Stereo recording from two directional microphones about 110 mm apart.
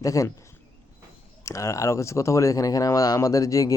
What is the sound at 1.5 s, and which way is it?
Speech, 25° left (ahead or behind).